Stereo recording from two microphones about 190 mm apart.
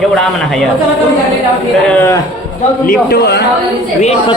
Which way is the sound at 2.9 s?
55° left (ahead or behind).